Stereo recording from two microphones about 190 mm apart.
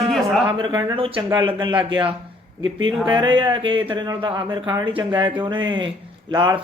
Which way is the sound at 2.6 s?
90° right.